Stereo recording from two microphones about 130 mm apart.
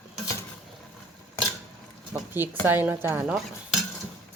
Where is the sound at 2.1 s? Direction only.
15° right (ahead or behind).